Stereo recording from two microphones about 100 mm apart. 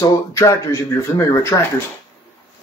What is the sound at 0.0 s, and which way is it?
Speech, 35° left (ahead or behind).